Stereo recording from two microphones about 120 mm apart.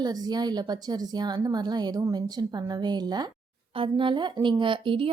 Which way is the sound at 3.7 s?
50° right (ahead or behind).